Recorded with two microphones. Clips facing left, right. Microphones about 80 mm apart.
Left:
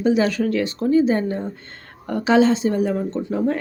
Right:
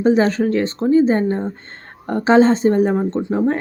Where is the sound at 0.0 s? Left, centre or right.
Right.